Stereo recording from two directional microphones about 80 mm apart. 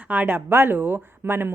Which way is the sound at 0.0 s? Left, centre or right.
Centre.